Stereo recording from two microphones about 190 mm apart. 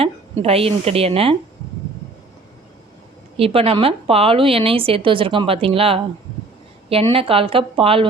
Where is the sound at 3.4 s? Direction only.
30° right (ahead or behind).